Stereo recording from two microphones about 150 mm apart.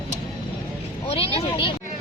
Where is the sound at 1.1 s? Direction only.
40° left (ahead or behind).